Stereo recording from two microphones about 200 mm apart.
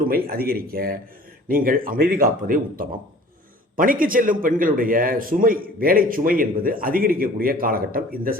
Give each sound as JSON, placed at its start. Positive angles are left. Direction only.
{"t": 0.0, "sound": "a man's voice", "side_deg": -50}